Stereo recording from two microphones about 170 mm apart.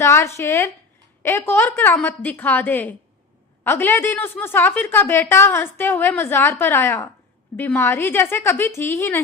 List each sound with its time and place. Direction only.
0.0 s a woman's voice: 15° left (ahead or behind)